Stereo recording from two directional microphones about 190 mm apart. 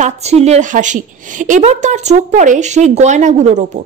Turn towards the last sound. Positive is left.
turn(degrees=-35)  # may be behind; listen again after turning